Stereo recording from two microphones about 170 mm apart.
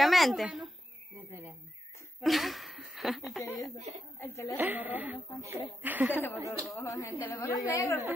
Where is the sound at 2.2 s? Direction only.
Centre (ahead or behind).